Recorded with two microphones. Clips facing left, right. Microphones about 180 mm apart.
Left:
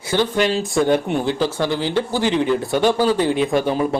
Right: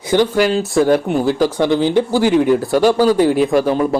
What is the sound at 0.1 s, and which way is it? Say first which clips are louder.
Speech: right 5 dB; 15° right (ahead or behind).